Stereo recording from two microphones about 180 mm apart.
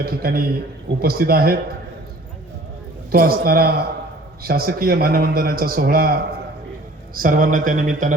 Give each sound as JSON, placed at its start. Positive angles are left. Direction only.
{"t": 0.0, "sound": "a man's voice", "side_deg": -60}
{"t": 3.1, "sound": "a man's voice", "side_deg": -55}